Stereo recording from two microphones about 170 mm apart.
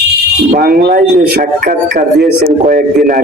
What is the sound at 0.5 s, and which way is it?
Speech, 60° right (ahead or behind).